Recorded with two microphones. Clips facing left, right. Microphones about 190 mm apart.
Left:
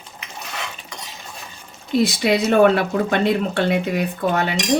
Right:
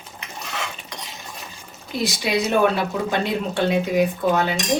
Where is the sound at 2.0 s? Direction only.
60° left (ahead or behind).